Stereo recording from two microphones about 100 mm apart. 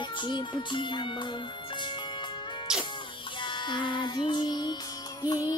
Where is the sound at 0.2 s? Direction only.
50° left (ahead or behind).